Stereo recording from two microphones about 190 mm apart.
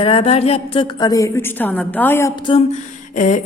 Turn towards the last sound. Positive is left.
turn(degrees=40)  # may be behind; listen again after turning